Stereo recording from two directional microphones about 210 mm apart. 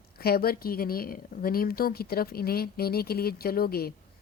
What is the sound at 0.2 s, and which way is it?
Speech, 45° left (ahead or behind).